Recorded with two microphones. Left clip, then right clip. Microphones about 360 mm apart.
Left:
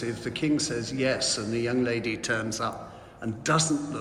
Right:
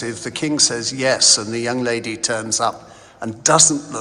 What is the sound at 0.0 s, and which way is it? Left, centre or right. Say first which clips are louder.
A man's voice: right 6 dB; centre.